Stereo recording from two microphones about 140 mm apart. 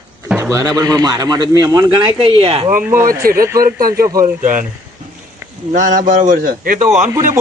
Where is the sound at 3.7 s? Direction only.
90° right.